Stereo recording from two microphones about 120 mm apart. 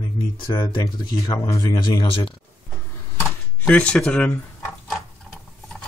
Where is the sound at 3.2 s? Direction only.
15° left (ahead or behind).